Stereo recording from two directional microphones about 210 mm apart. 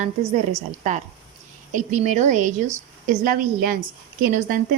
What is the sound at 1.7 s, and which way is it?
A woman's voice, 35° right (ahead or behind).